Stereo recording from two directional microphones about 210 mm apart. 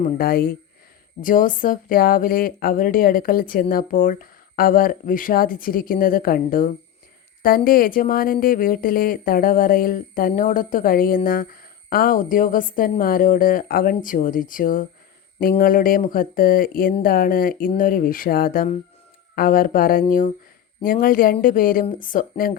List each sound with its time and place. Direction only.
0.2 s speech: 45° left (ahead or behind)